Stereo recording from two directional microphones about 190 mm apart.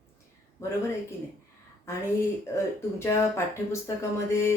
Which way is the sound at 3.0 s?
15° left (ahead or behind).